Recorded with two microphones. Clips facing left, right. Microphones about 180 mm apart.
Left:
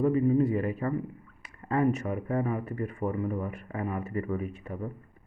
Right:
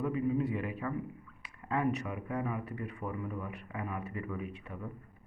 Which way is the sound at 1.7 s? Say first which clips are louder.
Left 6 dB; 45° left (ahead or behind).